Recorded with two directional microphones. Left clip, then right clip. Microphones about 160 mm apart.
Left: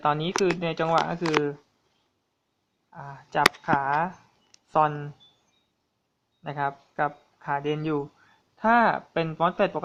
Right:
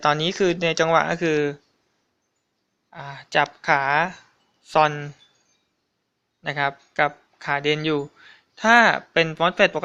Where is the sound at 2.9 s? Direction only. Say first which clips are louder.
Right 7 dB; 35° right (ahead or behind).